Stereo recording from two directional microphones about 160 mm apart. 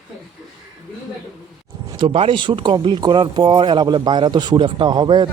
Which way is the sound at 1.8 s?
30° right (ahead or behind).